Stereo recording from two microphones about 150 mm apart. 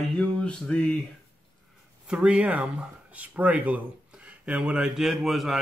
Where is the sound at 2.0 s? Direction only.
5° right (ahead or behind).